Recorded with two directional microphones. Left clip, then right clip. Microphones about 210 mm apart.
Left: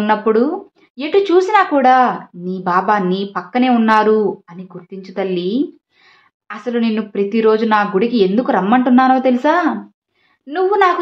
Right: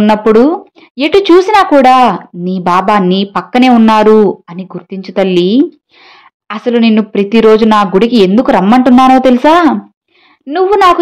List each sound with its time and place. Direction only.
0.0 s speech: 40° right (ahead or behind)